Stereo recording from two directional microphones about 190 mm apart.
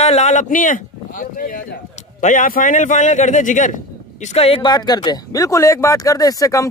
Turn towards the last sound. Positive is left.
turn(degrees=20)  # may be behind; listen again after turning